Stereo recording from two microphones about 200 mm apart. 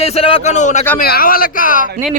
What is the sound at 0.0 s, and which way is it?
Speech, 30° left (ahead or behind).